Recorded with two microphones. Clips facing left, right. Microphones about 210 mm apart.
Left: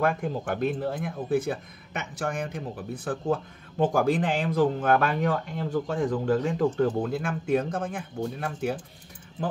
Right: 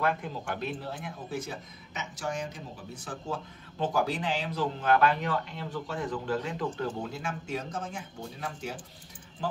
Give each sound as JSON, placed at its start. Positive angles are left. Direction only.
{"t": 0.0, "sound": "speech", "side_deg": 50}